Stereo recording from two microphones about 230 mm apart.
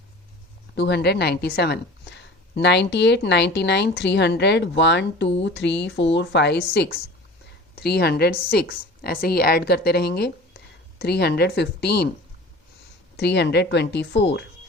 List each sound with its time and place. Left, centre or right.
0.8 s a woman's voice: left
13.1 s a woman's voice: left